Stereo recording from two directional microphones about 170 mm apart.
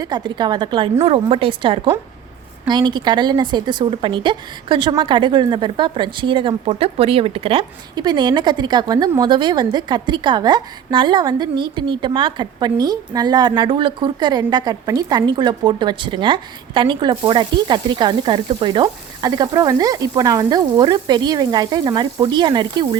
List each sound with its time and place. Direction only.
0.0 s a woman's voice: 25° right (ahead or behind)